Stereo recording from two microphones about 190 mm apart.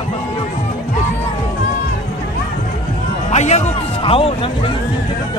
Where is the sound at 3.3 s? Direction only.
35° left (ahead or behind).